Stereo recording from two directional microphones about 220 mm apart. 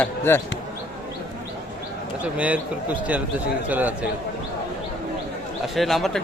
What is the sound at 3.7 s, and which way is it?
Speech, 5° right (ahead or behind).